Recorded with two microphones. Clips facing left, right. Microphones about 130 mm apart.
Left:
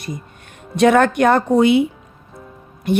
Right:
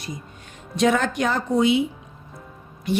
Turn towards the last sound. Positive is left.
turn(degrees=55)  # may be behind; listen again after turning